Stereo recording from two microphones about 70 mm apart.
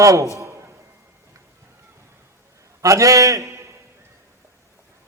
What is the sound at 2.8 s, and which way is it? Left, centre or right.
Speech, right.